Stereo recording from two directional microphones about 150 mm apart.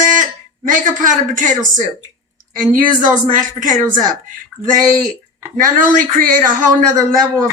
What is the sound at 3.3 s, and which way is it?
A man's voice, 60° right (ahead or behind).